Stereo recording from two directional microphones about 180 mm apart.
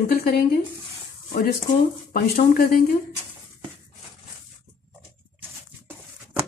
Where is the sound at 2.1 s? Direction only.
50° left (ahead or behind).